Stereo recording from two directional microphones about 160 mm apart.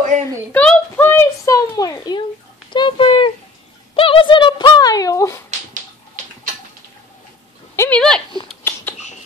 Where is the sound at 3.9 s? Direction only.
35° left (ahead or behind).